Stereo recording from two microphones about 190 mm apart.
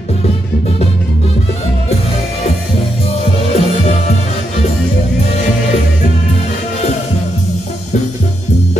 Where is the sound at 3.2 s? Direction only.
30° left (ahead or behind).